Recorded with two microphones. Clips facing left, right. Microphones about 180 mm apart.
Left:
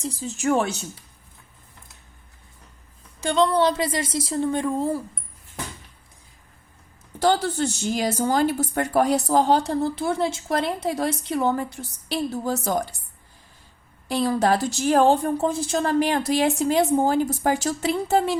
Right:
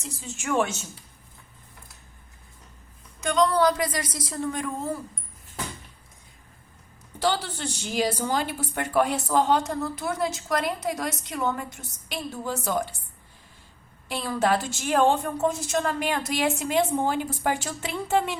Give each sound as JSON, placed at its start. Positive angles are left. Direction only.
{"t": 0.0, "sound": "a woman's voice", "side_deg": 35}
{"t": 3.2, "sound": "a woman's voice", "side_deg": 30}
{"t": 7.2, "sound": "a woman's voice", "side_deg": 45}
{"t": 14.1, "sound": "a woman's voice", "side_deg": 40}